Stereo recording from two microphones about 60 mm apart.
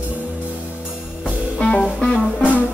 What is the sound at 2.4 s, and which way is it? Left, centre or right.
Music, left.